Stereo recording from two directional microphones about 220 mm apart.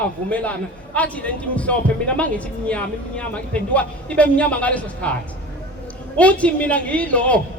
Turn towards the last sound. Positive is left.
turn(degrees=5)  # may be behind; listen again after turning